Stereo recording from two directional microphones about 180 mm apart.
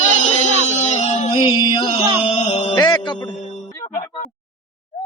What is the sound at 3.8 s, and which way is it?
Music, 45° left (ahead or behind).